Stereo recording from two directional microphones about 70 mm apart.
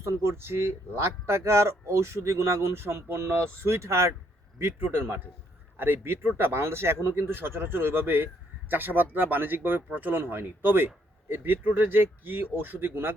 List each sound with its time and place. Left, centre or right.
0.0 s speech: right